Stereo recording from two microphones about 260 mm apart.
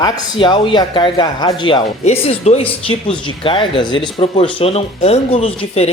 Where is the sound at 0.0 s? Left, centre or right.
Centre.